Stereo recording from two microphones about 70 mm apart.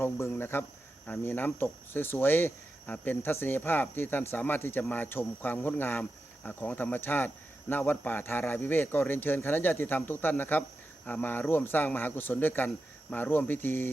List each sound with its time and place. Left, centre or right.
0.0 s speech: left